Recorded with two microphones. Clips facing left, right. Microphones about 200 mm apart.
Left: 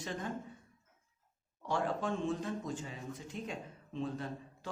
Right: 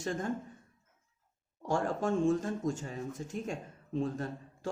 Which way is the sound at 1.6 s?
45° right (ahead or behind).